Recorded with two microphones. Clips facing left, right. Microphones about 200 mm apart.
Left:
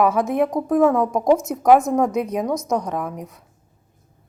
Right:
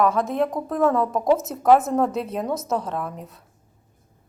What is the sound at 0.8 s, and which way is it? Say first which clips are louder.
Speech: left 1 dB; centre (ahead or behind).